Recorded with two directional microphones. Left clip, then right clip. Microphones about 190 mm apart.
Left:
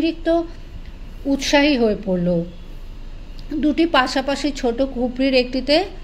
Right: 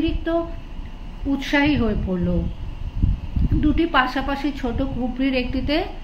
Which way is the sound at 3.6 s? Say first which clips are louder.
Left 2 dB; 40° left (ahead or behind).